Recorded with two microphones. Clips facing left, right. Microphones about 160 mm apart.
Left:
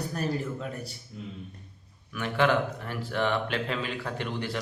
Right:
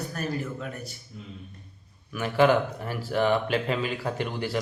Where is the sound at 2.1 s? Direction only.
5° right (ahead or behind).